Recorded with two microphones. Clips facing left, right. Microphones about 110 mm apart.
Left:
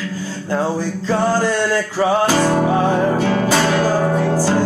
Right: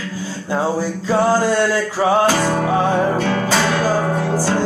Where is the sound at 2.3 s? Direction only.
15° left (ahead or behind).